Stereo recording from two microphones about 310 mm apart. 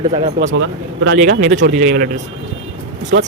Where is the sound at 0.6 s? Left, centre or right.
Right.